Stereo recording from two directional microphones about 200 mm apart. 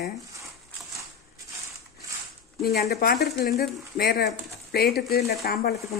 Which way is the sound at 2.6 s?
50° left (ahead or behind).